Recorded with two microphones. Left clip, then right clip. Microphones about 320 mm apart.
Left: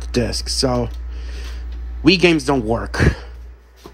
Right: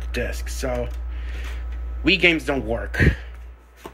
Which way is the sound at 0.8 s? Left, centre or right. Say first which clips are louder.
Left 4 dB; centre.